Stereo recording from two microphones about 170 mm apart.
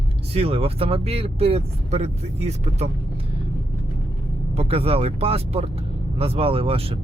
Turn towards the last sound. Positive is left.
turn(degrees=-35)  # may be behind; listen again after turning